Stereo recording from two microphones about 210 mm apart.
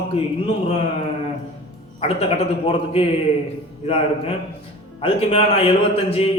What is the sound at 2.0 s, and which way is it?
Speech, 25° left (ahead or behind).